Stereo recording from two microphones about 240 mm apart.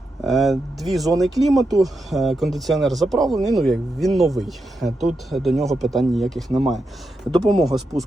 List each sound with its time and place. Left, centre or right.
0.3 s speech: centre